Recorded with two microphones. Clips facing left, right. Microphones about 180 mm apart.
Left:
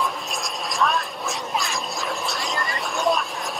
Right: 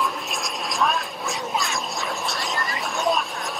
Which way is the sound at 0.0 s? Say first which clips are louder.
Even; centre (ahead or behind).